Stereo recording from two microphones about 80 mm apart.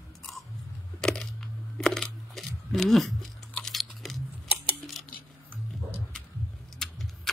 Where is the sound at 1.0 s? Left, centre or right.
Centre.